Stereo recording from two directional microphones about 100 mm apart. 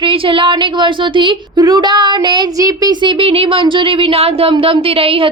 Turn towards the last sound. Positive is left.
turn(degrees=-70)  # may be behind; listen again after turning